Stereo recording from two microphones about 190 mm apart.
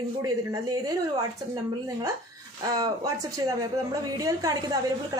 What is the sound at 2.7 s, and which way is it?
A woman's voice, 20° right (ahead or behind).